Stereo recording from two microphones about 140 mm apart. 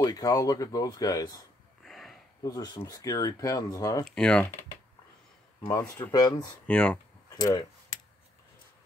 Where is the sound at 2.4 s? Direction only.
25° left (ahead or behind).